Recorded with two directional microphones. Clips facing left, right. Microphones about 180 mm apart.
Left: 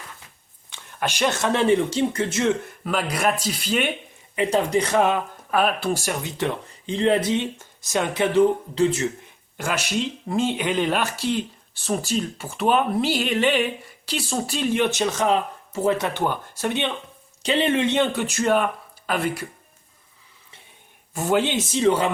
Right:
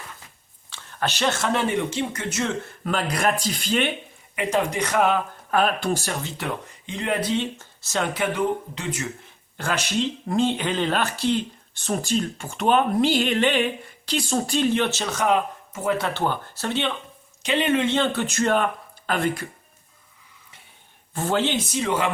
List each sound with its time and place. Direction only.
0.7 s a sound: 10° left (ahead or behind)
1.5 s speech: 30° left (ahead or behind)
2.8 s speech: 5° left (ahead or behind)
4.4 s speech: 35° left (ahead or behind)
5.5 s speech: 5° left (ahead or behind)
6.3 s speech: 30° left (ahead or behind)
9.6 s speech: 10° left (ahead or behind)
15.3 s speech: 30° left (ahead or behind); by 19.5 s 5° left (ahead or behind)
21.1 s speech: 10° left (ahead or behind)
21.7 s speech: 30° left (ahead or behind)